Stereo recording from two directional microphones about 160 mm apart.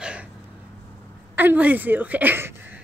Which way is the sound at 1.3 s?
10° right (ahead or behind).